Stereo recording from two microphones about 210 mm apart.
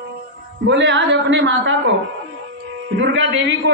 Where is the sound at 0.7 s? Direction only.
60° right (ahead or behind).